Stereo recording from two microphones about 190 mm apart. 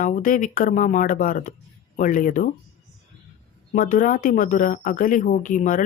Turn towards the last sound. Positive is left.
turn(degrees=45)  # may be behind; listen again after turning